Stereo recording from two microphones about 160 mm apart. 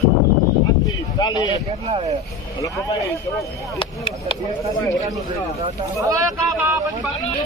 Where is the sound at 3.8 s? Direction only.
35° left (ahead or behind).